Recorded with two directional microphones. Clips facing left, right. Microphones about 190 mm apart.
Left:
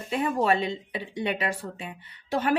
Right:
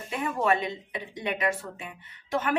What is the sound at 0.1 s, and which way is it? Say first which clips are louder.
A woman's voice: left 2 dB; 30° left (ahead or behind).